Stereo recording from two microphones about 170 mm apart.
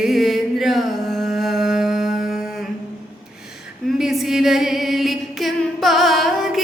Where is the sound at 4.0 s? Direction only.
Centre (ahead or behind).